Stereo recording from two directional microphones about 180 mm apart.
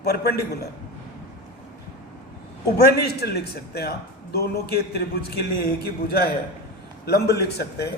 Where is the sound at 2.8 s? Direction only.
60° left (ahead or behind).